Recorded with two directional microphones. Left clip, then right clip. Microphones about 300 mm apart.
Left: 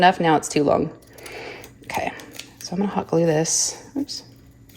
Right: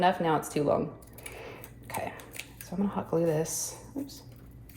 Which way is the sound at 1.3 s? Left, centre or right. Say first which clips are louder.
Left 11 dB; left.